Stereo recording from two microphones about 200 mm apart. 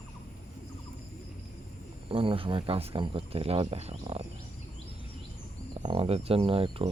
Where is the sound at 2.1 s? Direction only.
25° right (ahead or behind).